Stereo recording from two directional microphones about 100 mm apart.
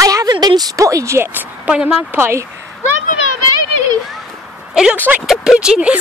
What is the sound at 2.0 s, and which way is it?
Speech, 25° right (ahead or behind).